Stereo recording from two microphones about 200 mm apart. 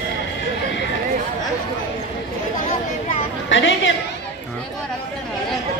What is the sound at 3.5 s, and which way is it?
Chatter, 65° left (ahead or behind).